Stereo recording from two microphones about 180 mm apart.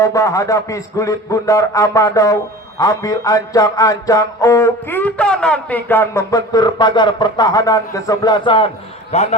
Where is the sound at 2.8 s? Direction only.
20° left (ahead or behind).